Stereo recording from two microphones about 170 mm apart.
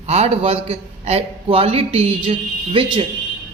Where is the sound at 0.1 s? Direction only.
35° right (ahead or behind).